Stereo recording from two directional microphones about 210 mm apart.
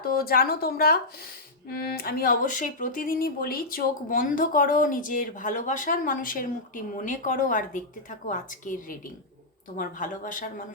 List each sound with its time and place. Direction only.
0.0 s speech: 45° left (ahead or behind)